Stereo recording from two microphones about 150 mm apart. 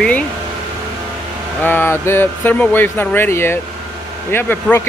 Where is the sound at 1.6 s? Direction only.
15° left (ahead or behind).